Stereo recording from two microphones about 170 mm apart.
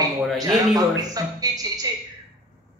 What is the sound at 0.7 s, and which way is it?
A man's voice, 20° right (ahead or behind).